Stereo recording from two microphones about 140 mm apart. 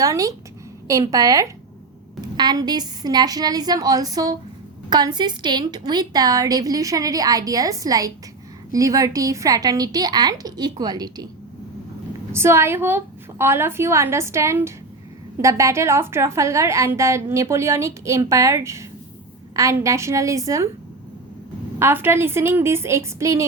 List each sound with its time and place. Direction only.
0.0 s a woman's voice: 25° right (ahead or behind)
12.3 s a woman's voice: 20° right (ahead or behind)
21.8 s a woman's voice: 15° right (ahead or behind)